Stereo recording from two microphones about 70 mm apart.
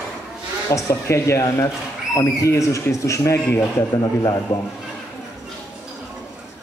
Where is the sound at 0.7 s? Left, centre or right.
Left.